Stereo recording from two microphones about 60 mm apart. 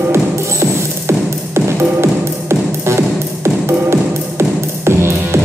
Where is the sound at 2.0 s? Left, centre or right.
Right.